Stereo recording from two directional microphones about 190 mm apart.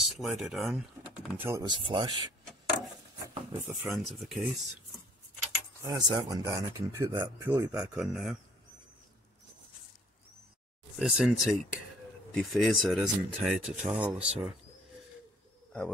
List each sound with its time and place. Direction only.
0.0 s speech: centre (ahead or behind)
1.4 s speech: 20° right (ahead or behind)
3.6 s speech: centre (ahead or behind)
5.9 s speech: 20° right (ahead or behind); by 8.4 s centre (ahead or behind)
11.0 s speech: 5° right (ahead or behind)